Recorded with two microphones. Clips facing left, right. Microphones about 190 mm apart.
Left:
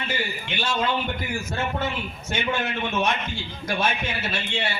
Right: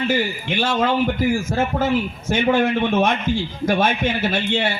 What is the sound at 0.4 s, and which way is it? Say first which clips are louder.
A man's voice: right 4 dB; 50° right (ahead or behind).